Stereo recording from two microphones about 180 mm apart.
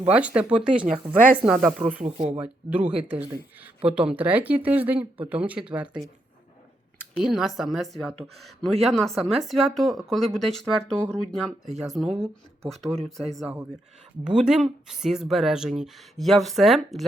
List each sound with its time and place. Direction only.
0.0 s speech: 5° right (ahead or behind)
2.1 s speech: 25° right (ahead or behind)
2.4 s speech: 5° right (ahead or behind)
7.2 s speech: centre (ahead or behind)